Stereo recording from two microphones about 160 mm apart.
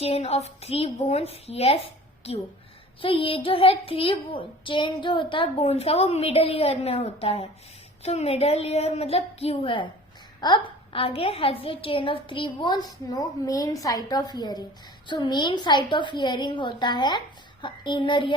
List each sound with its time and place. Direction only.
0.0 s a child's voice: 40° left (ahead or behind)
3.0 s a child's voice: 35° left (ahead or behind)